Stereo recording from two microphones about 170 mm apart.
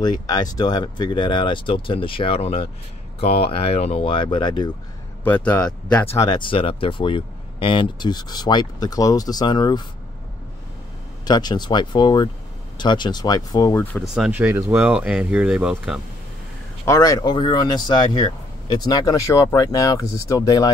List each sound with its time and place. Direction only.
0.0 s speech: 25° left (ahead or behind)
5.2 s speech: 10° left (ahead or behind)
6.1 s speech: 25° left (ahead or behind)
11.2 s speech: 25° left (ahead or behind)
14.0 s speech: 5° right (ahead or behind)
16.8 s speech: 20° left (ahead or behind)